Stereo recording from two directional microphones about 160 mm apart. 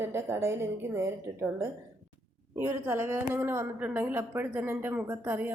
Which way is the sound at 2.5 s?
15° right (ahead or behind).